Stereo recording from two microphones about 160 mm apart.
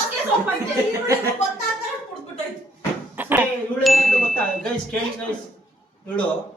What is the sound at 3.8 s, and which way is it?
Chime, centre (ahead or behind).